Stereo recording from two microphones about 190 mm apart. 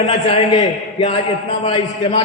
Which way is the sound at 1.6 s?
30° left (ahead or behind).